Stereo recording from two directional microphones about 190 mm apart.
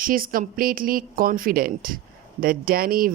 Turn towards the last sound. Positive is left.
turn(degrees=-50)  # may be behind; listen again after turning